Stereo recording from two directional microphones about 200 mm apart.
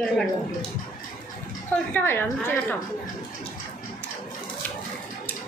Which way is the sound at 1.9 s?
10° left (ahead or behind).